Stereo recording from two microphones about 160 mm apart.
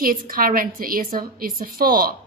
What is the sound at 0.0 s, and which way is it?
A woman's voice, 60° right (ahead or behind).